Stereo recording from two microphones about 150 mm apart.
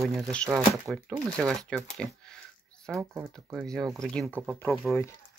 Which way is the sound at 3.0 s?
15° right (ahead or behind).